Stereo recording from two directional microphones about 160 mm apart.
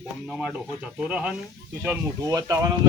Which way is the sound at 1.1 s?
5° right (ahead or behind).